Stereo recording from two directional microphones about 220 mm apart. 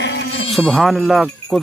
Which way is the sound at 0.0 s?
55° left (ahead or behind).